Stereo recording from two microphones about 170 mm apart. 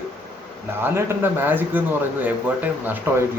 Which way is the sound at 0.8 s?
15° right (ahead or behind).